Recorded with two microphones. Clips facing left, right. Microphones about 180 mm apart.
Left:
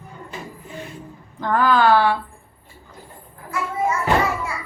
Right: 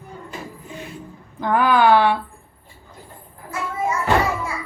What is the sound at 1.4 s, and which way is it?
Speech, 15° right (ahead or behind).